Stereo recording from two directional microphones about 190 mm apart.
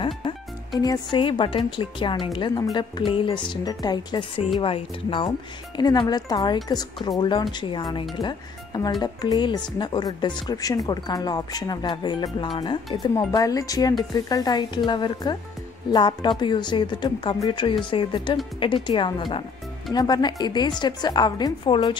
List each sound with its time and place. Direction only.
0.7 s a woman's voice: 20° left (ahead or behind)